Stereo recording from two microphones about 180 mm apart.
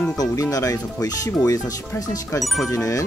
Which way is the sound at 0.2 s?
20° left (ahead or behind).